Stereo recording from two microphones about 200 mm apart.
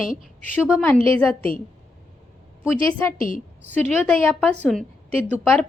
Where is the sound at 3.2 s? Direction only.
45° left (ahead or behind).